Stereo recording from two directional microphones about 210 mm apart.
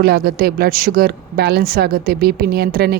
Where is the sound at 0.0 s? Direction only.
45° right (ahead or behind).